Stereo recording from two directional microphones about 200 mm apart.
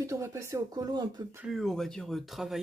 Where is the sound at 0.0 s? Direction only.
15° right (ahead or behind).